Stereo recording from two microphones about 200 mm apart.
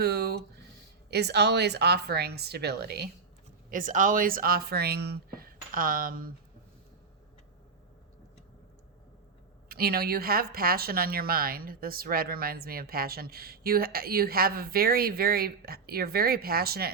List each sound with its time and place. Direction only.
0.0 s speech: 55° right (ahead or behind)
3.7 s speech: 40° right (ahead or behind)
9.6 s speech: 50° right (ahead or behind)